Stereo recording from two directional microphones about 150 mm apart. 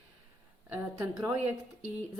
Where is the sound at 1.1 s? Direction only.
15° right (ahead or behind).